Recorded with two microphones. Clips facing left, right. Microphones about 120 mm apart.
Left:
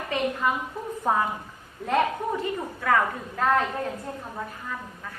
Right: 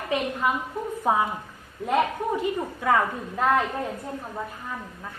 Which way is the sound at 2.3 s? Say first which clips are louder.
Right 2 dB; 15° right (ahead or behind).